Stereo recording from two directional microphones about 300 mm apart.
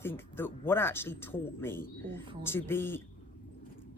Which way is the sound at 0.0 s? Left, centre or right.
Centre.